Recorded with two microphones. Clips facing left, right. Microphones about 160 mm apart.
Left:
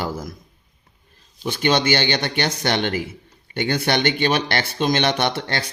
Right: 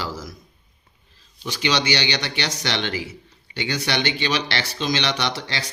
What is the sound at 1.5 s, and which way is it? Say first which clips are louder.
A man's voice: left 4 dB; 50° left (ahead or behind).